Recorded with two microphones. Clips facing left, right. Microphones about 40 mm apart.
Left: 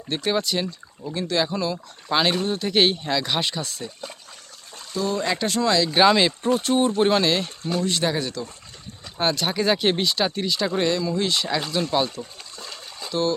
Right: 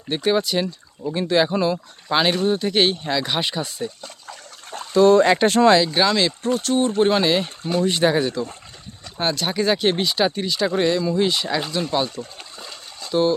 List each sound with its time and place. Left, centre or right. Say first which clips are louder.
0.1 s speech: right 4 dB; centre
1.1 s speech: right 5 dB; right
2.0 s speech: right 3 dB; centre
4.9 s speech: right 12 dB; right
5.2 s speech: right 8 dB; right
5.9 s speech: left 2 dB; centre
7.0 s speech: right 2 dB; centre
9.1 s speech: right 1 dB; centre
13.1 s speech: right 5 dB; centre